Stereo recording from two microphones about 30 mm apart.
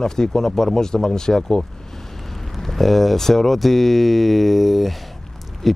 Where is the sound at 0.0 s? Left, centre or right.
Centre.